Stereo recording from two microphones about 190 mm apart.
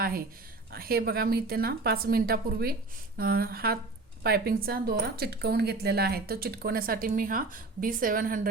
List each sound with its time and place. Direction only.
0.7 s speech: 55° right (ahead or behind)